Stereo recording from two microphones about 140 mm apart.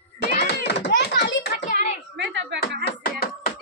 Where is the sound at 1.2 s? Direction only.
80° left.